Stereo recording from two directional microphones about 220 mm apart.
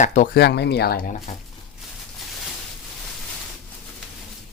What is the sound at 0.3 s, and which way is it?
Speech, 50° left (ahead or behind).